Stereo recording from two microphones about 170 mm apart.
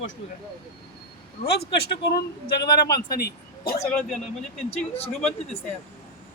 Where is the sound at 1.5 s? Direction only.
75° left (ahead or behind).